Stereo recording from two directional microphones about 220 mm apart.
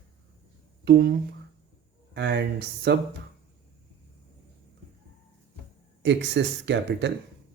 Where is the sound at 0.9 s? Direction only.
50° right (ahead or behind).